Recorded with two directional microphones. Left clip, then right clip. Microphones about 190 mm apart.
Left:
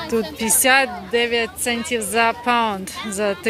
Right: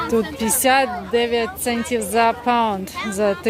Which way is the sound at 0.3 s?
Centre (ahead or behind).